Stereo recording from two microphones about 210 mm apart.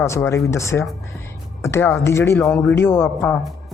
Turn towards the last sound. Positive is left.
turn(degrees=10)  # may be behind; listen again after turning